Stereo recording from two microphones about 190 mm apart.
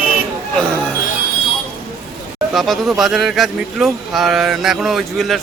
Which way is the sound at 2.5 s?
Centre (ahead or behind).